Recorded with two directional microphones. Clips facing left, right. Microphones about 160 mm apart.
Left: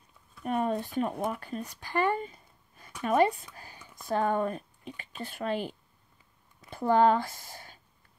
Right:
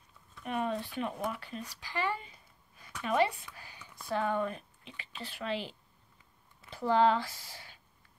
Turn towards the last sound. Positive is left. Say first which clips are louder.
# left 4 dB
turn(degrees=50)  # may be behind; listen again after turning